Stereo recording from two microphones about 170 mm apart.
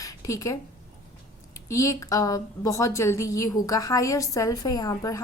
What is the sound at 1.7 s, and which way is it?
A woman's voice, 20° left (ahead or behind).